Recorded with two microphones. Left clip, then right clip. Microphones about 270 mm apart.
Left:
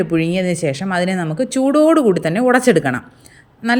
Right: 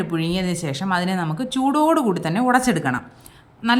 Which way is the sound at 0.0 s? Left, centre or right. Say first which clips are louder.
Left 7 dB; centre.